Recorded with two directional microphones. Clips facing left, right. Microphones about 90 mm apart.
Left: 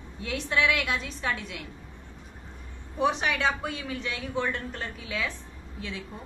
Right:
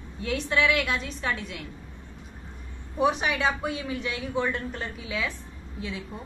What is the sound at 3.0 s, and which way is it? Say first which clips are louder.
A woman's voice: right 1 dB; 5° right (ahead or behind).